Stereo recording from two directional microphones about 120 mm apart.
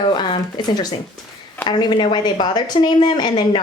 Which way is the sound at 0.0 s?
40° left (ahead or behind).